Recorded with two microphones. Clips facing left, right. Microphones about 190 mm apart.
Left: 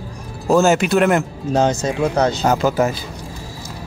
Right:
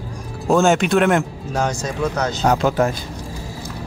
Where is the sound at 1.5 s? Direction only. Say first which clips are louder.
Left 5 dB; 25° left (ahead or behind).